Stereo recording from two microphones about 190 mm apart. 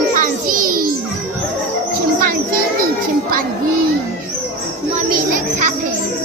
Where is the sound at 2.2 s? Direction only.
50° right (ahead or behind).